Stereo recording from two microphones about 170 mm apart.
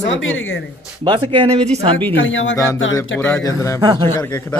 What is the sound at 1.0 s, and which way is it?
Speech, 30° right (ahead or behind).